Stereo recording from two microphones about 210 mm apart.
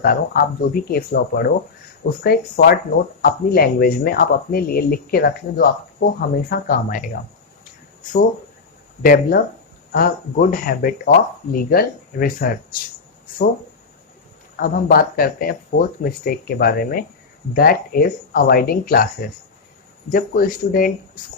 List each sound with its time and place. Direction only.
0.0 s speech: 45° left (ahead or behind)
9.0 s speech: 45° left (ahead or behind)
14.5 s speech: 45° left (ahead or behind)